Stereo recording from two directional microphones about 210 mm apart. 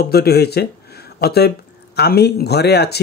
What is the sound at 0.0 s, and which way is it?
Speech, 50° left (ahead or behind).